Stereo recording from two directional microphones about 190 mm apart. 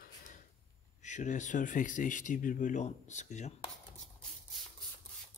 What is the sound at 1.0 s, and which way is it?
Speech, 40° left (ahead or behind).